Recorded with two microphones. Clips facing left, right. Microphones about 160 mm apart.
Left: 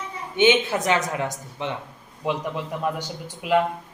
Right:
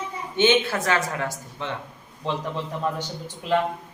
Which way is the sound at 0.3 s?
15° left (ahead or behind).